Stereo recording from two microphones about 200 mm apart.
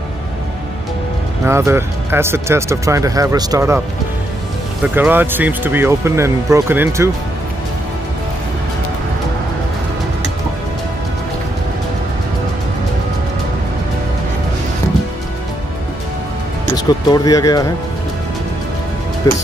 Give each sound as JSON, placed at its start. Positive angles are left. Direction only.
{"t": 1.5, "sound": "speech", "side_deg": -15}
{"t": 4.9, "sound": "speech", "side_deg": -10}
{"t": 16.6, "sound": "speech", "side_deg": 20}
{"t": 19.2, "sound": "speech", "side_deg": 15}